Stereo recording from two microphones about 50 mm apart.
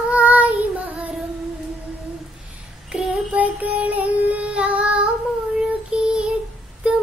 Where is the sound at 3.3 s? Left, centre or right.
Right; by 6.3 s centre.